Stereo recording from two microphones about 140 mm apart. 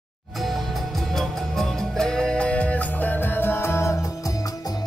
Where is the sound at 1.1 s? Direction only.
5° left (ahead or behind); by 3.9 s 20° left (ahead or behind).